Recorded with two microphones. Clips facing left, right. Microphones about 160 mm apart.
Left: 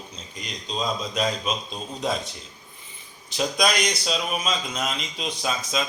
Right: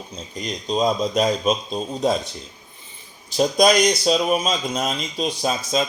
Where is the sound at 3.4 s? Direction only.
40° right (ahead or behind).